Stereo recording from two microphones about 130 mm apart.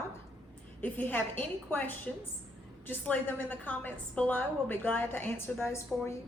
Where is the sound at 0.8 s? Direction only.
15° left (ahead or behind).